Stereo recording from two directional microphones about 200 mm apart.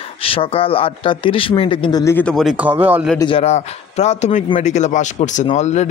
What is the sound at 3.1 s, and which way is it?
A man's voice, 25° left (ahead or behind).